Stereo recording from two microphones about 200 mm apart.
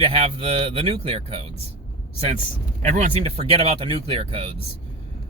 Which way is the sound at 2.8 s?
35° right (ahead or behind).